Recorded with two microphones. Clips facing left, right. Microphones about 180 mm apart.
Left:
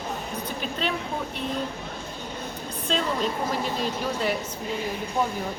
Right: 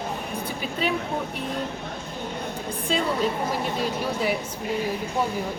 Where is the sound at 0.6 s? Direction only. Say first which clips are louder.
Right 3 dB; 10° right (ahead or behind).